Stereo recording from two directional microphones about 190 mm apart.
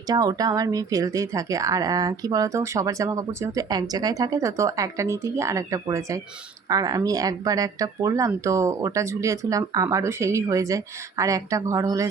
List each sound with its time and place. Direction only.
0.1 s speech: 20° right (ahead or behind)